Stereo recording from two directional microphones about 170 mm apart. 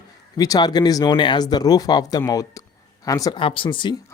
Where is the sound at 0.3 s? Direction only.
20° left (ahead or behind).